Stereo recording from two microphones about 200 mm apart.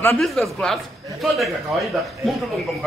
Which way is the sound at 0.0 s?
10° left (ahead or behind).